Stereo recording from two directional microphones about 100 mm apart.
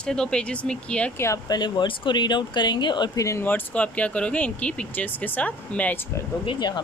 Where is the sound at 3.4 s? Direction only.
15° left (ahead or behind).